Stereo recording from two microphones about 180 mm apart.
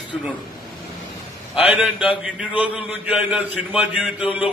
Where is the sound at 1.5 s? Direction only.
5° right (ahead or behind).